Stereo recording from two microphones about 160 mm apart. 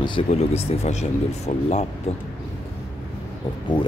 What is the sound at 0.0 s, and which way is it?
Speech, 35° left (ahead or behind).